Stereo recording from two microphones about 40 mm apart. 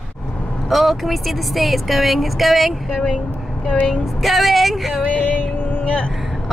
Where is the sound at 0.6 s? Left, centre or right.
Centre.